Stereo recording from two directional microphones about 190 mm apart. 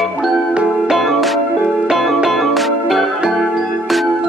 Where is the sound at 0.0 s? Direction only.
Centre (ahead or behind).